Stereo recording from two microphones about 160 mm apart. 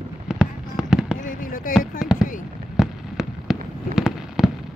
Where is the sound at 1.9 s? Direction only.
5° right (ahead or behind).